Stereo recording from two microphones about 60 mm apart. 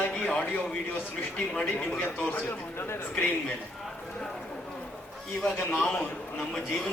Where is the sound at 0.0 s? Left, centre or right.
Centre.